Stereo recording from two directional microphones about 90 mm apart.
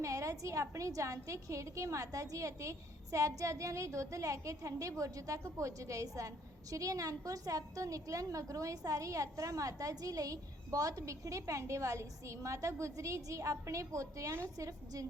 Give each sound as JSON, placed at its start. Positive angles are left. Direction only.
{"t": 0.0, "sound": "a woman's voice", "side_deg": -35}